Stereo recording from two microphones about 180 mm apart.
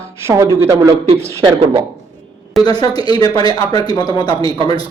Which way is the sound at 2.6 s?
20° left (ahead or behind).